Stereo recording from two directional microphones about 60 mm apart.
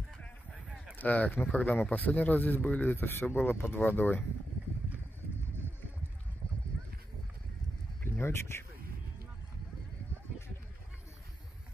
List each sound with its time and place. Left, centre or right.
0.9 s speech: left
3.0 s speech: left
8.0 s a sound: left